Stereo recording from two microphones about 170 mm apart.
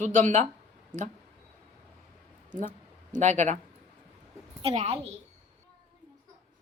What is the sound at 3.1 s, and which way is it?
Speech, 45° right (ahead or behind).